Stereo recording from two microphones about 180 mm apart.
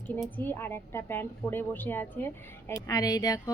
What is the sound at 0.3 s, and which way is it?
A woman's voice, 10° left (ahead or behind).